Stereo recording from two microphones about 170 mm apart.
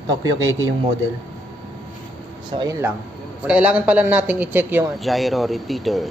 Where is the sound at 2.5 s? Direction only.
25° right (ahead or behind).